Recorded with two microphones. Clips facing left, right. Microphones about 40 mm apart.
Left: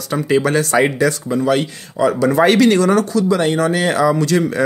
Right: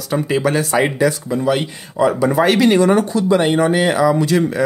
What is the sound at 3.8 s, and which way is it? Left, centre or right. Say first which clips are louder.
Speech: even; centre.